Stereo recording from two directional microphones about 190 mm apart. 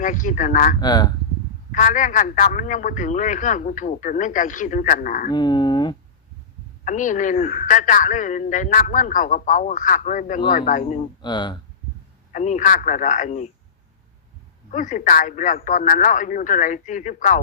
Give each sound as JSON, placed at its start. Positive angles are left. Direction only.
{"t": 0.0, "sound": "a man's voice", "side_deg": 40}
{"t": 0.8, "sound": "speech", "side_deg": 20}
{"t": 1.7, "sound": "a man's voice", "side_deg": 40}
{"t": 5.3, "sound": "speech", "side_deg": 20}
{"t": 6.8, "sound": "a man's voice", "side_deg": 40}
{"t": 11.2, "sound": "speech", "side_deg": 25}
{"t": 12.3, "sound": "a man's voice", "side_deg": 40}
{"t": 14.7, "sound": "a man's voice", "side_deg": 45}